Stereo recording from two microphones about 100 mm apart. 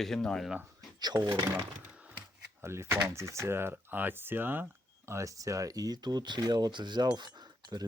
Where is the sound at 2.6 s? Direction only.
20° right (ahead or behind).